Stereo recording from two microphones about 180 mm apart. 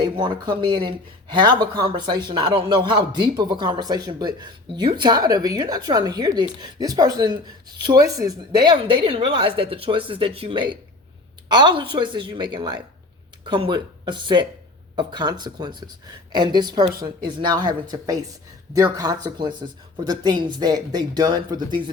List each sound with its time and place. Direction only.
0.0 s speech: 25° right (ahead or behind)